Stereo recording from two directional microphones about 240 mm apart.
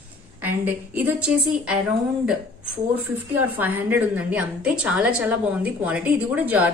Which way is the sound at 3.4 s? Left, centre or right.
Centre.